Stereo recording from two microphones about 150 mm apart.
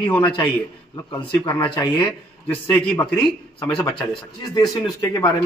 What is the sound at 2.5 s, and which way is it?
Speech, 10° left (ahead or behind).